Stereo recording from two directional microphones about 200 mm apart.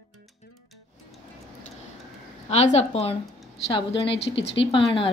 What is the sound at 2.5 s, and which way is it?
A woman's voice, 35° left (ahead or behind).